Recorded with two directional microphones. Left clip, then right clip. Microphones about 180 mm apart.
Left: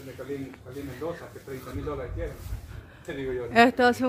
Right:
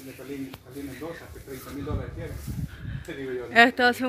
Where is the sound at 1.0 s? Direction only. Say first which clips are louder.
Left 5 dB; 45° right (ahead or behind).